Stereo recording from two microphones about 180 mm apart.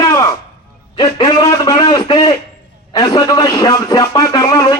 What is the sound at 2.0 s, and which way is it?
Radio, 25° left (ahead or behind).